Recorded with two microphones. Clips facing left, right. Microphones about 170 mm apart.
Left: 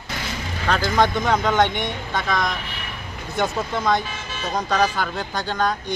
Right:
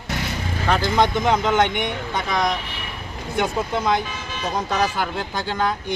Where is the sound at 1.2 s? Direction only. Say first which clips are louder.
Even; 10° right (ahead or behind).